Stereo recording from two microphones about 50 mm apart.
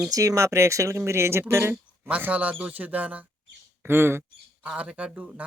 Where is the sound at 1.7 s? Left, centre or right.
Right.